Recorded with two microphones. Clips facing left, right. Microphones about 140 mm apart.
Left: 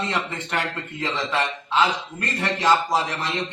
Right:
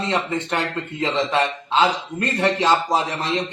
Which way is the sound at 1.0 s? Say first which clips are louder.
Right 5 dB; 20° right (ahead or behind).